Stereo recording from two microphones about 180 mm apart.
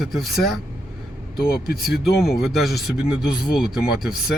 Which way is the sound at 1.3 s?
60° left (ahead or behind).